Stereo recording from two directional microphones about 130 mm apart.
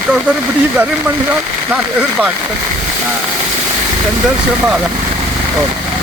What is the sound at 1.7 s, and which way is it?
Speech, 10° right (ahead or behind).